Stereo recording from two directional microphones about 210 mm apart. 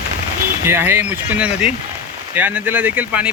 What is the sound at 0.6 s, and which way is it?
Speech, 10° right (ahead or behind).